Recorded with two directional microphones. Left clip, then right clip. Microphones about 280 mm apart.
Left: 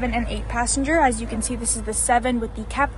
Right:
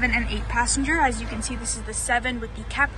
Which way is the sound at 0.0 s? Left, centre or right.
Centre.